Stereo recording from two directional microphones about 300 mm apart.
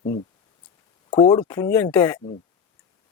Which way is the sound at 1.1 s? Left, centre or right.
Centre.